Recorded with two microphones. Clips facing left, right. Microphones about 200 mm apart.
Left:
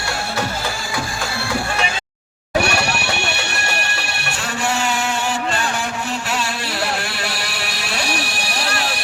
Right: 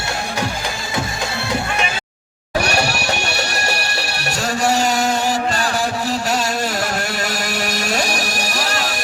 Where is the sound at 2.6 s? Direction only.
40° right (ahead or behind).